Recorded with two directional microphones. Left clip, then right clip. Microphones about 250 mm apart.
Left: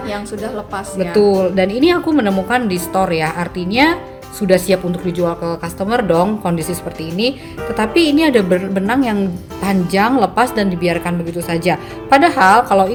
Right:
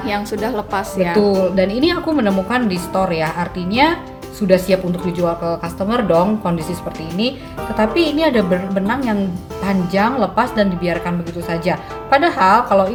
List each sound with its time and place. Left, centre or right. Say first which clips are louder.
0.1 s a woman's voice: right 5 dB; right
1.1 s speech: left 3 dB; left
7.8 s a woman's voice: left 2 dB; left